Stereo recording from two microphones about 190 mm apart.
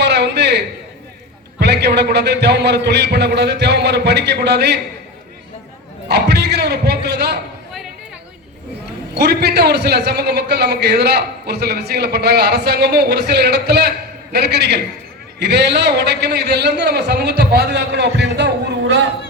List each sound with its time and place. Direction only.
0.0 s a sound: 65° right (ahead or behind)
1.5 s a man's voice: 60° right (ahead or behind)
6.1 s speech: 60° right (ahead or behind)
9.1 s a man's voice: 60° right (ahead or behind)